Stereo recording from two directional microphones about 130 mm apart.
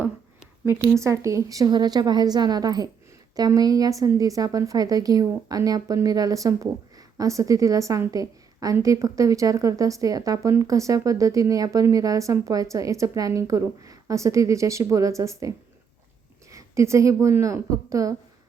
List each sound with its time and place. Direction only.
0.6 s a woman's voice: 20° right (ahead or behind)